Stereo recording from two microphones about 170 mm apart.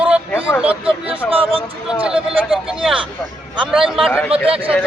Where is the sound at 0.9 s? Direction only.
35° right (ahead or behind).